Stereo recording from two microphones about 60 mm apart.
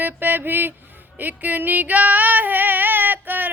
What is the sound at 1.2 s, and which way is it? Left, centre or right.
Female singing, right.